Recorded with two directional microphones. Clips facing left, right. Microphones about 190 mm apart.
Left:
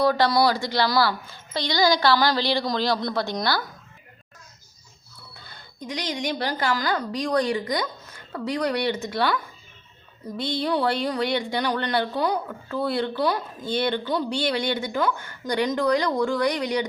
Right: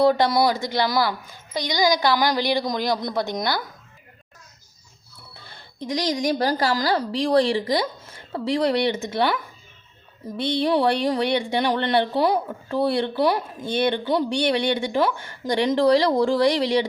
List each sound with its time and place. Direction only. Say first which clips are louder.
0.0 s speech: right 2 dB; 25° right (ahead or behind)
5.5 s speech: right 6 dB; 30° right (ahead or behind)